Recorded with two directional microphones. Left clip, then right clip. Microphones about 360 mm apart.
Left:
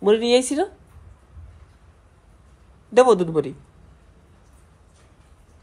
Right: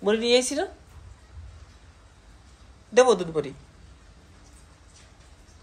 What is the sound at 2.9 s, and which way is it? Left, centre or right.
Speech, centre.